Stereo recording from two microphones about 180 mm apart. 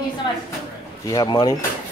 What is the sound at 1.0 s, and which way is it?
Speech, 20° left (ahead or behind).